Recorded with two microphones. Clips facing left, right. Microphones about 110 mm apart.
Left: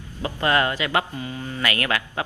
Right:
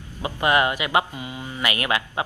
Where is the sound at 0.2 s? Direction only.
20° right (ahead or behind).